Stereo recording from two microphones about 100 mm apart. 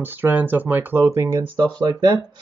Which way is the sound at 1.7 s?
40° right (ahead or behind).